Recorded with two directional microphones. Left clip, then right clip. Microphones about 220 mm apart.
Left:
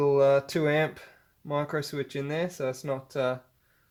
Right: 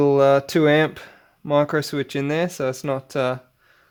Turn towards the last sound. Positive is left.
turn(degrees=-50)  # may be behind; listen again after turning